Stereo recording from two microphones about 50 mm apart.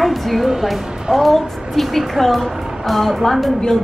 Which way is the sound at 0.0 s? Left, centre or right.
Centre.